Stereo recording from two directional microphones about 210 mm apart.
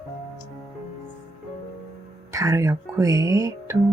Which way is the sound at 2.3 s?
15° right (ahead or behind).